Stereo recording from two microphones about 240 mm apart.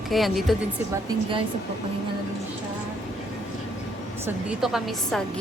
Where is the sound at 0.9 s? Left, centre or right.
Right.